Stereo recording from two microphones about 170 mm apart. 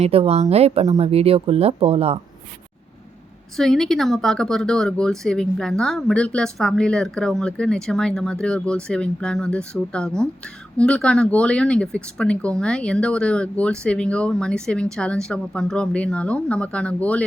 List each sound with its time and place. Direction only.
0.0 s speech: 35° right (ahead or behind)
3.6 s a woman's voice: centre (ahead or behind)